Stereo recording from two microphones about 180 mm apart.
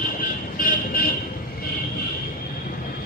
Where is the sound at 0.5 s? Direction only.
50° left (ahead or behind).